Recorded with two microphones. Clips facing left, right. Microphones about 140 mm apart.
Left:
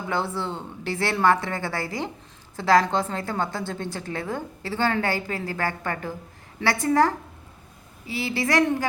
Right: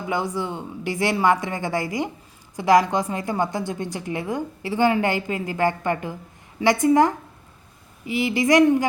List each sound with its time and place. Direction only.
0.1 s a woman's voice: 15° right (ahead or behind)